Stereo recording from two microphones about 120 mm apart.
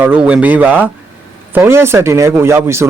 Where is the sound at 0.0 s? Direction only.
15° right (ahead or behind).